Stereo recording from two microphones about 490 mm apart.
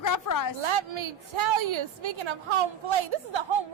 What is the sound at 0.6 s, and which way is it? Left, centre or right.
A woman's voice, right.